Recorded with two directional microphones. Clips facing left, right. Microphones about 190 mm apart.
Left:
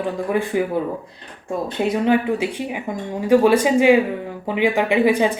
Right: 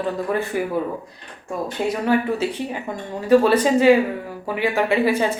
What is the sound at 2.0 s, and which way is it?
Speech, 15° left (ahead or behind).